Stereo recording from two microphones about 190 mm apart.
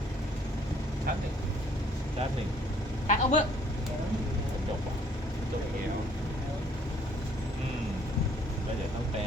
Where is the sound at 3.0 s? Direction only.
40° left (ahead or behind).